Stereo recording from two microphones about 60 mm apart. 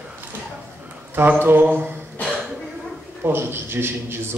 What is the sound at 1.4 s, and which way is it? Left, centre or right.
Speech, right.